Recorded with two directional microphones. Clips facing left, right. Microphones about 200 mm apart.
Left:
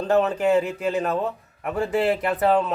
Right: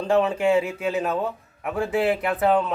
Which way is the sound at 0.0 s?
Centre (ahead or behind).